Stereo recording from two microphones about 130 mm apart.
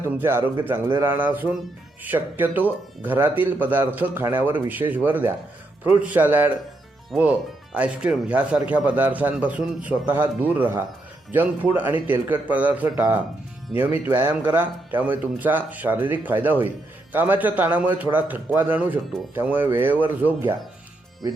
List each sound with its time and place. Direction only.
0.0 s speech: 20° right (ahead or behind)